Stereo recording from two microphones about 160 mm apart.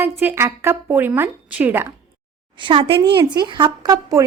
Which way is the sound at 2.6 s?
30° right (ahead or behind).